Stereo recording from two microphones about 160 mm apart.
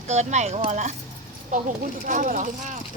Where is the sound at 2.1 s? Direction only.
55° right (ahead or behind).